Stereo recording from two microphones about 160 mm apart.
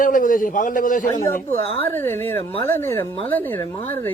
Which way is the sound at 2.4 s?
35° left (ahead or behind).